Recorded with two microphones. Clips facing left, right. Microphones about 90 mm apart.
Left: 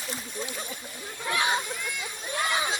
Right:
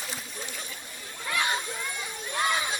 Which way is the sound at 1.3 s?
15° left (ahead or behind).